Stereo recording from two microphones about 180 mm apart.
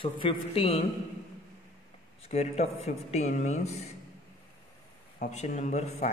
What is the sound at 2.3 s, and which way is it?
Speech, 35° left (ahead or behind).